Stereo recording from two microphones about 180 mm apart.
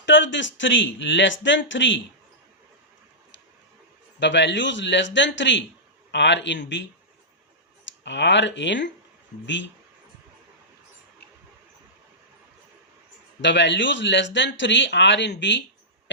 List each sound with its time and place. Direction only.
0.0 s a man's voice: 85° left
4.2 s speech: 75° left (ahead or behind)
6.1 s speech: 80° left
8.0 s speech: 75° left (ahead or behind)
13.4 s speech: 80° left